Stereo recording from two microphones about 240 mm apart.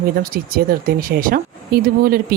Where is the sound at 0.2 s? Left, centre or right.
Right.